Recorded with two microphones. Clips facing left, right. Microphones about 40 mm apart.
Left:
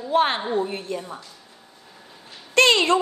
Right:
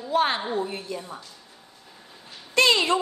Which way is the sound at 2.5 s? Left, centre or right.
Left.